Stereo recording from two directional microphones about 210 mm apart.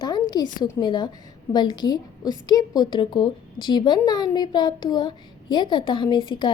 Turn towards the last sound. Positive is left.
turn(degrees=20)  # may be behind; listen again after turning